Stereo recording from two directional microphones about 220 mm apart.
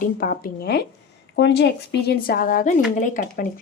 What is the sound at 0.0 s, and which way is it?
Speech, 40° left (ahead or behind).